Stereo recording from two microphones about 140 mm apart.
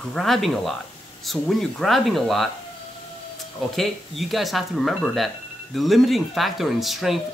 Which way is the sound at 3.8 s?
Centre (ahead or behind).